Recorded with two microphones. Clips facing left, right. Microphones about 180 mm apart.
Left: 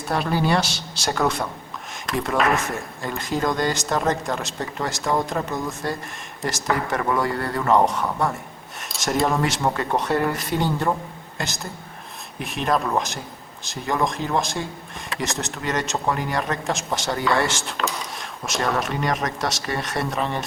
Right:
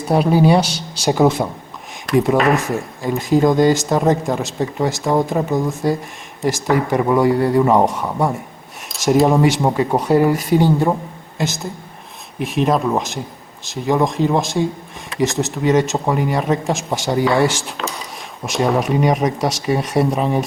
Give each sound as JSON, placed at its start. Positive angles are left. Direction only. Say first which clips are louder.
{"t": 0.0, "sound": "speech", "louder": "right 9 dB", "side_deg": 0}
{"t": 2.4, "sound": "speech", "louder": "right 5 dB", "side_deg": 0}
{"t": 7.0, "sound": "speech", "louder": "right 7 dB", "side_deg": -20}
{"t": 7.3, "sound": "speech", "louder": "right 11 dB", "side_deg": 0}
{"t": 8.0, "sound": "speech", "louder": "right 4 dB", "side_deg": -20}
{"t": 8.9, "sound": "speech", "louder": "right 8 dB", "side_deg": 0}